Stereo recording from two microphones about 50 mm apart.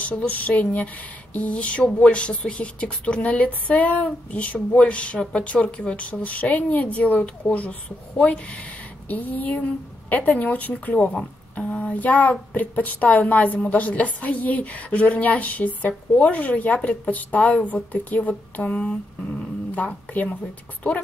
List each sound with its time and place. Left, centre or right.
0.3 s a woman's voice: left
9.1 s a woman's voice: left